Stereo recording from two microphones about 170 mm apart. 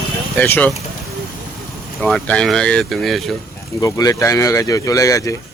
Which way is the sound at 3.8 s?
20° left (ahead or behind).